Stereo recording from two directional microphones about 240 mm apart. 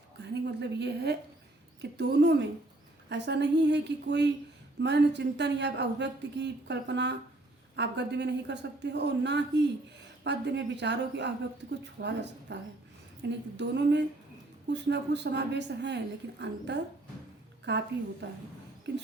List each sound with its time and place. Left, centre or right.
0.2 s a woman's voice: right